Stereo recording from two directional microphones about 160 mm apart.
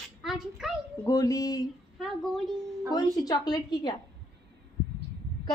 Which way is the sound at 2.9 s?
20° left (ahead or behind).